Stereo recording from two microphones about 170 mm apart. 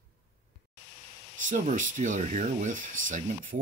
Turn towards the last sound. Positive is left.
turn(degrees=-50)  # may be behind; listen again after turning